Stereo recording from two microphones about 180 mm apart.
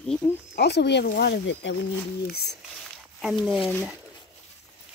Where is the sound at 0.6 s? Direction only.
70° left (ahead or behind).